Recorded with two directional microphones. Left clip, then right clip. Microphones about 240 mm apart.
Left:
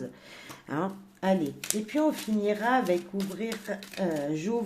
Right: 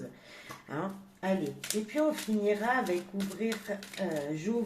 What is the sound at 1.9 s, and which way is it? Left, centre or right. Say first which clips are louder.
Speech: left 3 dB; left.